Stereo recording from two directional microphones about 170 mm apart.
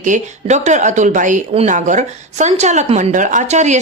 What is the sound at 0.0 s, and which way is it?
A woman's voice, 45° right (ahead or behind).